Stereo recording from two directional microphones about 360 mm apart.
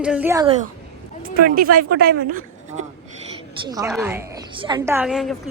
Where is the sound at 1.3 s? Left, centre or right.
Right.